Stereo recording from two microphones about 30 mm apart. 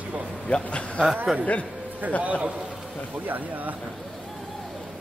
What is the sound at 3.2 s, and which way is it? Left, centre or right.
Speech, right.